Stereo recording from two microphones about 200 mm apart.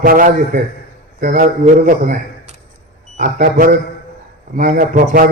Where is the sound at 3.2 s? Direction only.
45° right (ahead or behind).